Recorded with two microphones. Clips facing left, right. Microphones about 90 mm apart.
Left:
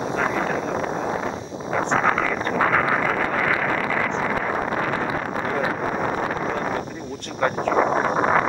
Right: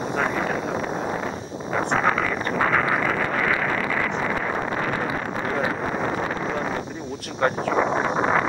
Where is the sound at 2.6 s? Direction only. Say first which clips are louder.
Left 1 dB; 50° left (ahead or behind).